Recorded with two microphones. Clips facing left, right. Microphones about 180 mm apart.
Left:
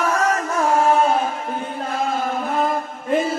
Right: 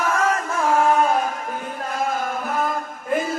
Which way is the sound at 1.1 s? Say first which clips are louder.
Left 1 dB; 25° left (ahead or behind).